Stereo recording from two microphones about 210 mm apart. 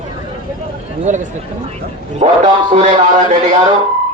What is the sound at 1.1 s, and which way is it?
A man's voice, 35° right (ahead or behind).